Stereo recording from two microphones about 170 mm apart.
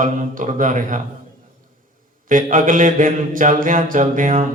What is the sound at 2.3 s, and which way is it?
Speech, 55° right (ahead or behind).